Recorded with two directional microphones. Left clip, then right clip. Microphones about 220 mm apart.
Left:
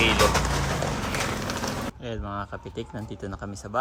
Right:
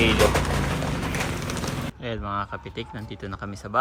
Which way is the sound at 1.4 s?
35° left (ahead or behind).